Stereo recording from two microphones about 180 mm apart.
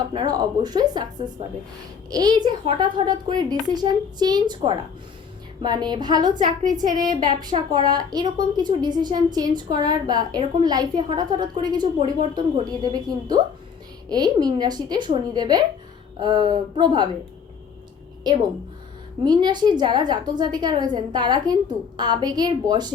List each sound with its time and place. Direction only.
0.1 s a woman's voice: 25° right (ahead or behind)
6.4 s a woman's voice: 45° right (ahead or behind)
6.7 s a woman's voice: 20° right (ahead or behind)
18.3 s a woman's voice: 25° right (ahead or behind)